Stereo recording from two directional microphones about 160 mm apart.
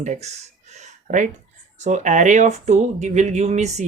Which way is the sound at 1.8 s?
50° right (ahead or behind).